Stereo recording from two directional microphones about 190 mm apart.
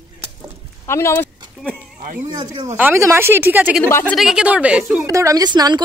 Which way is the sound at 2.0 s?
45° right (ahead or behind).